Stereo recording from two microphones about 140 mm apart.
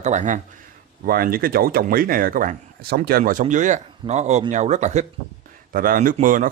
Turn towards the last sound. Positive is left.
turn(degrees=-75)  # may be behind; listen again after turning